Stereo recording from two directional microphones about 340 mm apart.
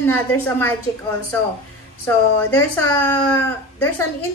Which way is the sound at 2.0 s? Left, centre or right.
Centre.